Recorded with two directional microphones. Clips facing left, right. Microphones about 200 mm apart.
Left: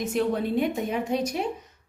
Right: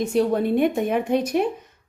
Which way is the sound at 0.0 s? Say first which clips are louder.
Right 5 dB; 35° right (ahead or behind).